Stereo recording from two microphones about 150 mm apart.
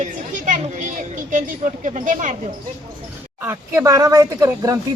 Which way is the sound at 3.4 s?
15° right (ahead or behind).